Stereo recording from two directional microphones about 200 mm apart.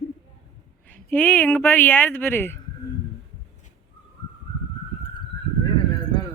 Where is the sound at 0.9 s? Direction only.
10° left (ahead or behind).